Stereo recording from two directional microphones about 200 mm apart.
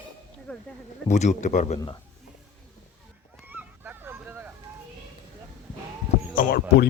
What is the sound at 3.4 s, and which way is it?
Honk, 10° right (ahead or behind).